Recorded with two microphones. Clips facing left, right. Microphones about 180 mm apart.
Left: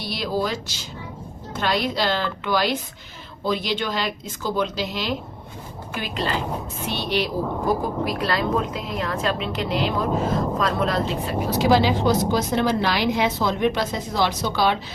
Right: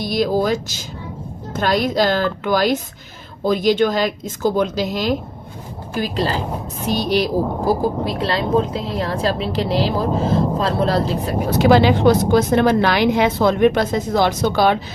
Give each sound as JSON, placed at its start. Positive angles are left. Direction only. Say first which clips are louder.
{"t": 0.0, "sound": "a woman's voice", "louder": "right 7 dB", "side_deg": -45}
{"t": 11.5, "sound": "a woman's voice", "louder": "right 5 dB", "side_deg": -60}